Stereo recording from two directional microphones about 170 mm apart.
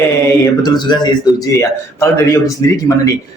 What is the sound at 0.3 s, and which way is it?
A man's voice, 20° left (ahead or behind).